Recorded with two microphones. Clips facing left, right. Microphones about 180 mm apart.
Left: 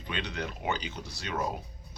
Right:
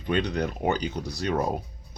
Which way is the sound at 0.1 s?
40° right (ahead or behind).